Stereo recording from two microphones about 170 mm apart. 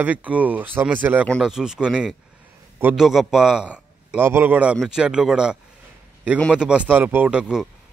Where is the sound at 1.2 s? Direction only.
Centre (ahead or behind).